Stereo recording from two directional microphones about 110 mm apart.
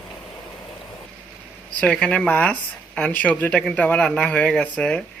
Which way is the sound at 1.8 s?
10° left (ahead or behind).